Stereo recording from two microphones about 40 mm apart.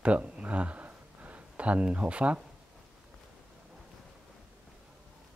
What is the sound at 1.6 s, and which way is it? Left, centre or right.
Speech, right.